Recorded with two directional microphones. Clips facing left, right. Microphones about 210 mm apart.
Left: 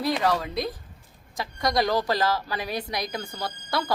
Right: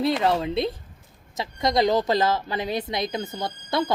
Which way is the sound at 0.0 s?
25° right (ahead or behind).